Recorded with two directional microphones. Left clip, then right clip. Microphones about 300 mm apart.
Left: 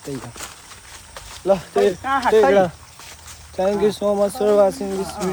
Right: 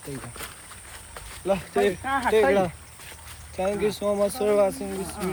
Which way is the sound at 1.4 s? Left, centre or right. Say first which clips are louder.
Left 6 dB; centre.